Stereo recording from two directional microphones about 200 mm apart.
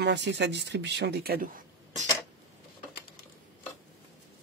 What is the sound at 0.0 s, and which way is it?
Speech, 60° right (ahead or behind).